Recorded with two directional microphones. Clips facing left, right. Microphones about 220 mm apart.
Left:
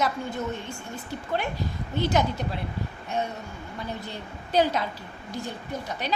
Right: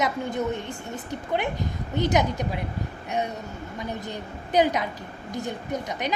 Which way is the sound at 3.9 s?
20° right (ahead or behind).